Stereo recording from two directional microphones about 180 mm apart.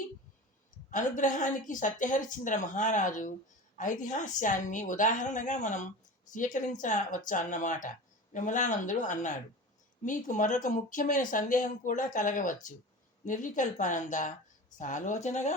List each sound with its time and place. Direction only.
0.9 s speech: 45° left (ahead or behind)